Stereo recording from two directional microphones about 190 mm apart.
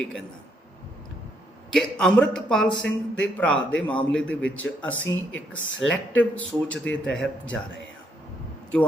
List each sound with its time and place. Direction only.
1.7 s a man's voice: 5° left (ahead or behind)
5.0 s speech: 90° left
5.9 s a man's voice: 5° left (ahead or behind)